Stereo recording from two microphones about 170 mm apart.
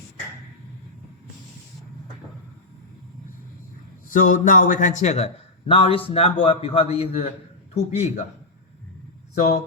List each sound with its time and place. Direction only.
4.1 s a man's voice: 55° left (ahead or behind)